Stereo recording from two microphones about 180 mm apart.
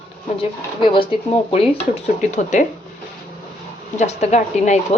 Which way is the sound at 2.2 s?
40° left (ahead or behind).